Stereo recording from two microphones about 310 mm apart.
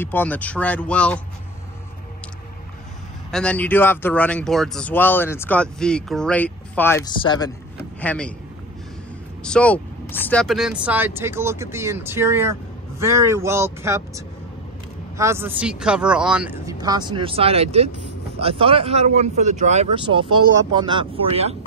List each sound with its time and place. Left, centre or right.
0.0 s speech: centre
3.3 s speech: centre
9.4 s speech: centre